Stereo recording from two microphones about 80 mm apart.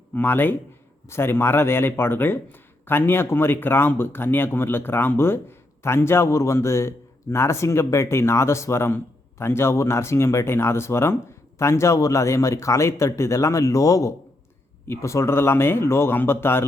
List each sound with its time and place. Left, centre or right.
0.1 s a man's voice: left